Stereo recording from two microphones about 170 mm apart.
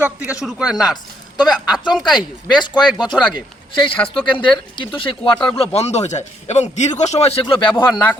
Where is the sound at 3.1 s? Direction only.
10° left (ahead or behind).